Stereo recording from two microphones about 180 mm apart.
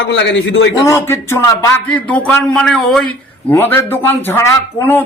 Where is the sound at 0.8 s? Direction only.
15° left (ahead or behind).